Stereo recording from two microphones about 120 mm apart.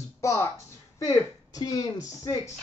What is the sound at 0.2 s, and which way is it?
Speech, 25° left (ahead or behind).